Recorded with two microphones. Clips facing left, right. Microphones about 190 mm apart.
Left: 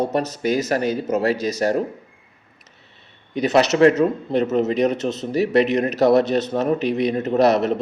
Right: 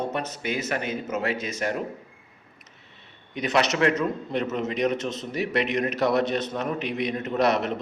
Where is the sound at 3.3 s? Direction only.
35° left (ahead or behind).